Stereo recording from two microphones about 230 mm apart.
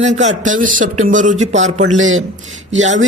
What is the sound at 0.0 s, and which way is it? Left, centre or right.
Speech, right.